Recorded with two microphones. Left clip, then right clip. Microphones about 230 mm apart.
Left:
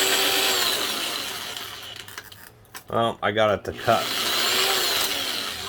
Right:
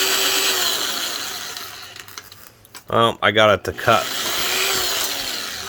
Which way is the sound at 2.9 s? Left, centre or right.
Right.